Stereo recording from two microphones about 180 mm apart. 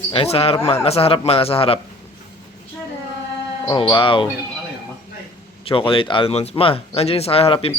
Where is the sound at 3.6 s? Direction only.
25° left (ahead or behind).